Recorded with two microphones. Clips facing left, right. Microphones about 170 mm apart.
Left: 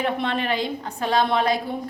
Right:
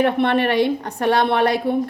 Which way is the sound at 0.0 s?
65° right (ahead or behind).